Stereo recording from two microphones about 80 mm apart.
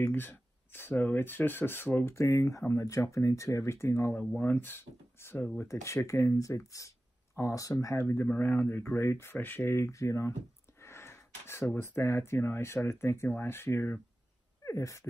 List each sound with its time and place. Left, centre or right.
0.0 s speech: left
2.1 s speech: left
8.0 s speech: left
10.8 s a sound: left
12.0 s speech: left
14.6 s speech: left